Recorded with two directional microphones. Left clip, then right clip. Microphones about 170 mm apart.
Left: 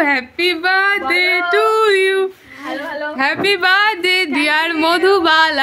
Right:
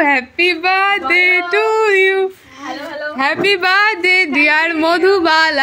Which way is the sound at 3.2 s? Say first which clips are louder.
Right 1 dB; 5° right (ahead or behind).